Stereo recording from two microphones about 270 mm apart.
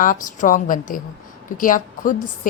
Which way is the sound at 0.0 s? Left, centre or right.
Left.